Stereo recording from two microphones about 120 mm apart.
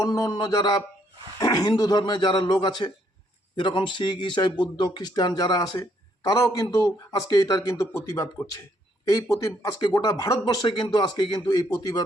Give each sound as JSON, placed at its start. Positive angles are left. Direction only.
{"t": 0.0, "sound": "a man's voice", "side_deg": 30}
{"t": 9.3, "sound": "a man's voice", "side_deg": 30}